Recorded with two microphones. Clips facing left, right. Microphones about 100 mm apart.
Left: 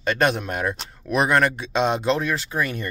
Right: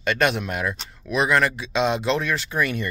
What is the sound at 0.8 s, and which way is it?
Speech, 55° left (ahead or behind).